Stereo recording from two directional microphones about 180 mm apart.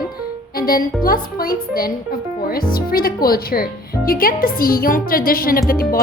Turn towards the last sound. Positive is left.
turn(degrees=55)  # may be behind; listen again after turning